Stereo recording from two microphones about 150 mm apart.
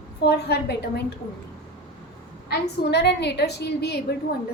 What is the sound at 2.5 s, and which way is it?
A woman's voice, 90° left.